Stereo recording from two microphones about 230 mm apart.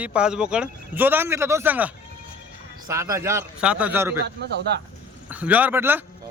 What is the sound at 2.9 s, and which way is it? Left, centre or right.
Speech, centre.